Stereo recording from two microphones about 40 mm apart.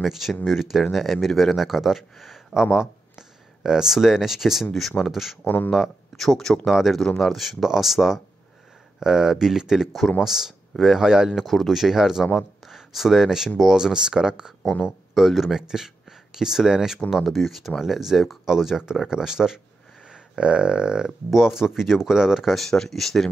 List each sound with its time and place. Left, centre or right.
0.0 s speech: centre
4.7 s speech: centre
5.1 s speech: centre
5.4 s speech: left
5.7 s speech: centre
6.7 s speech: centre
11.3 s speech: centre
15.1 s speech: centre
17.1 s speech: centre
22.7 s speech: centre